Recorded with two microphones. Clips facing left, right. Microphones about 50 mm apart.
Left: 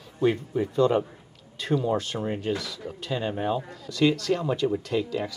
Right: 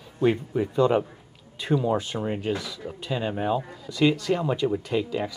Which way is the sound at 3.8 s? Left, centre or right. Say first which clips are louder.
Even; centre.